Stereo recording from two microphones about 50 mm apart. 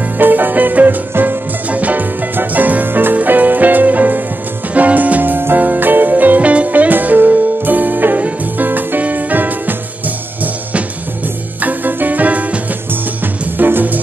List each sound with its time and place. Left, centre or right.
0.2 s music: right
1.7 s music: right
13.2 s music: right